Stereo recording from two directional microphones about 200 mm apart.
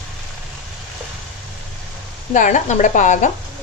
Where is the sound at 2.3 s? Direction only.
40° left (ahead or behind).